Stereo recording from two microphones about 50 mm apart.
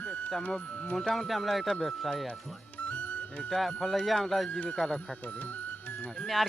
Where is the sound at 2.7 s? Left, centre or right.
Left.